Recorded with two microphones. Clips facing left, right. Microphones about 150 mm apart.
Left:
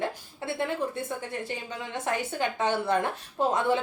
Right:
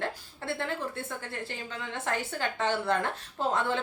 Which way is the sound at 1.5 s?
15° left (ahead or behind).